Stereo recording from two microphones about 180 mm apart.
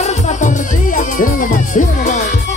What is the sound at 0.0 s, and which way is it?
Music, 40° left (ahead or behind).